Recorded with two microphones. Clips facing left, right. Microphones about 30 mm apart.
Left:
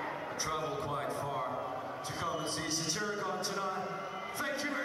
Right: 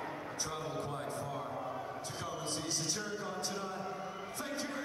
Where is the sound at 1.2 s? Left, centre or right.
Left.